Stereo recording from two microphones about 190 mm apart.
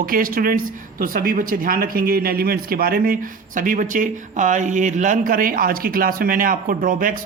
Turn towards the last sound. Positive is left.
turn(degrees=-45)  # may be behind; listen again after turning